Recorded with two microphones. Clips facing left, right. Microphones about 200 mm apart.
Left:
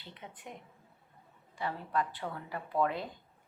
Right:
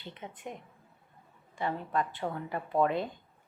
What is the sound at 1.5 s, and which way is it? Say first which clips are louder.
Speech: right 3 dB; 25° right (ahead or behind).